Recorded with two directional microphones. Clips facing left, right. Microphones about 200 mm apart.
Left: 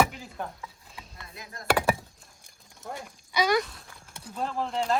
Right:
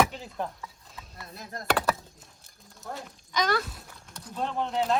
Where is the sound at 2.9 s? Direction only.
10° left (ahead or behind).